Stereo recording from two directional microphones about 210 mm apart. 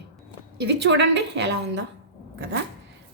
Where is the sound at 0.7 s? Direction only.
55° right (ahead or behind).